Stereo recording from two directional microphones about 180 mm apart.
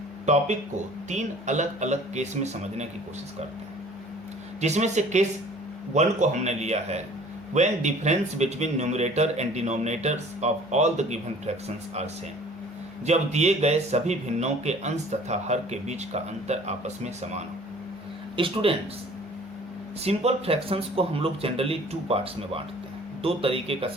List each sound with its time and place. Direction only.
1.1 s speech: 40° right (ahead or behind)
4.6 s speech: 40° right (ahead or behind)
13.1 s speech: 40° right (ahead or behind)
20.1 s speech: 35° right (ahead or behind)